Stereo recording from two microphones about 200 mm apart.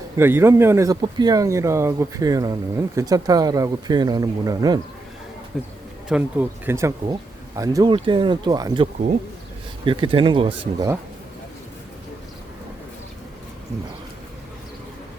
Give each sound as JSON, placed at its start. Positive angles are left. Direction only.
{"t": 0.2, "sound": "speech", "side_deg": -10}
{"t": 5.5, "sound": "speech", "side_deg": 0}